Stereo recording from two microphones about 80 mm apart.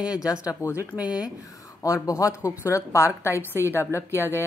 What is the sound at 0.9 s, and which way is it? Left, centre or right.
Speech, left.